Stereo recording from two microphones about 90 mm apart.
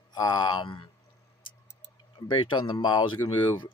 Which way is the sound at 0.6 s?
70° left (ahead or behind).